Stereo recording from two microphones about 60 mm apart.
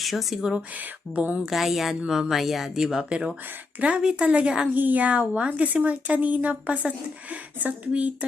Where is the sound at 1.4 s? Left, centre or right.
Centre.